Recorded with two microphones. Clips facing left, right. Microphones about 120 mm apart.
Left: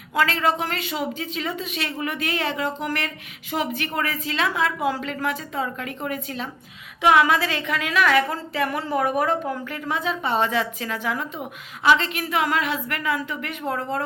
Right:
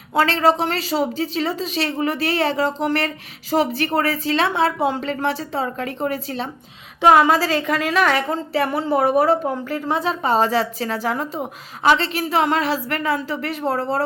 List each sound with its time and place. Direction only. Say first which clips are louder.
0.1 s a woman's voice: right 5 dB; 30° right (ahead or behind)